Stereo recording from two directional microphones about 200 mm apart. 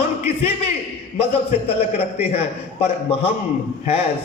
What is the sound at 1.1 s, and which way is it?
A man's voice, 30° left (ahead or behind).